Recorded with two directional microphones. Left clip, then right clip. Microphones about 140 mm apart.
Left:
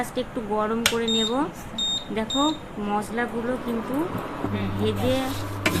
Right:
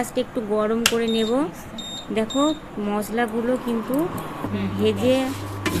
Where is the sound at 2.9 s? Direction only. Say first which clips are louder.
Right 2 dB; 20° right (ahead or behind).